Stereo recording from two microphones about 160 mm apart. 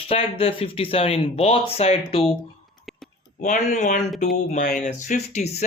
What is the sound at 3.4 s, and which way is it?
Speech, 50° left (ahead or behind).